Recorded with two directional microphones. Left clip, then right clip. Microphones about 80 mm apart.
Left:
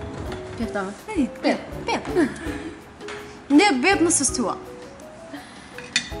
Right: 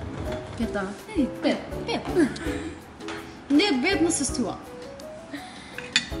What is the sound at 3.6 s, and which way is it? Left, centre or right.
Speech, left.